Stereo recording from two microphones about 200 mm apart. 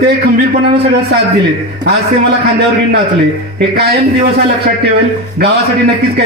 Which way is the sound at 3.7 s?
55° right (ahead or behind).